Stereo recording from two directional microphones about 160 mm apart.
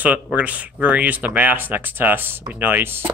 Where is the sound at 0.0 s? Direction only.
10° right (ahead or behind).